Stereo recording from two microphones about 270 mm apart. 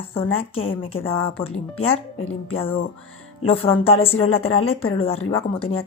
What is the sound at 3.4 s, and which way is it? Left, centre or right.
Speech, left.